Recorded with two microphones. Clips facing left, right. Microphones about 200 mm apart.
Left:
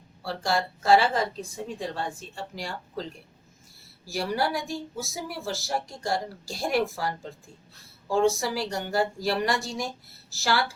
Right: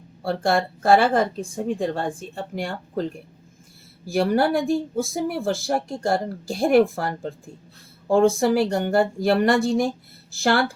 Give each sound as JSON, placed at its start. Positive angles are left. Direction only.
{"t": 0.2, "sound": "speech", "side_deg": -55}